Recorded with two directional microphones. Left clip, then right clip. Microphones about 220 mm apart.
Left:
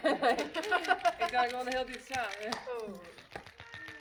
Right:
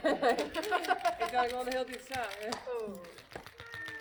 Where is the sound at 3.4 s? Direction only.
50° right (ahead or behind).